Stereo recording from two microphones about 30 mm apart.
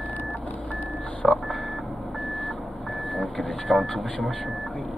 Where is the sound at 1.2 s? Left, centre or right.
Centre.